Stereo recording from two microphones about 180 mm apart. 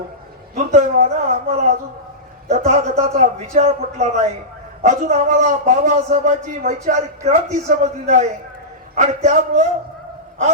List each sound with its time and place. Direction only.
0.5 s a man's voice: 40° right (ahead or behind)